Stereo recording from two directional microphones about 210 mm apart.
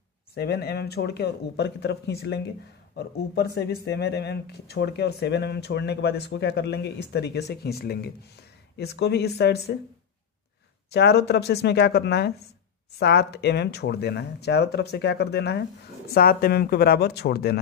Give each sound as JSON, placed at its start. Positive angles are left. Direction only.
{"t": 0.3, "sound": "speech", "side_deg": 50}
{"t": 10.9, "sound": "speech", "side_deg": 50}